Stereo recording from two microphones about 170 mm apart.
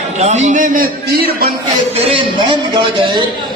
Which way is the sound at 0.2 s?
45° right (ahead or behind).